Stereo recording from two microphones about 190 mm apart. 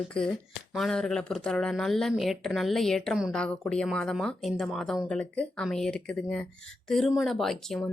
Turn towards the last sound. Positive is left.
turn(degrees=0)  # may be behind; listen again after turning